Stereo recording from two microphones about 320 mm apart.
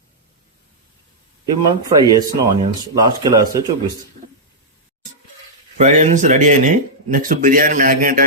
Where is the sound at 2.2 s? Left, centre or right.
Centre.